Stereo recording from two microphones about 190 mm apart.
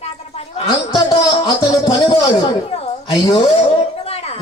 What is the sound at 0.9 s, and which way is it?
Music, 20° left (ahead or behind).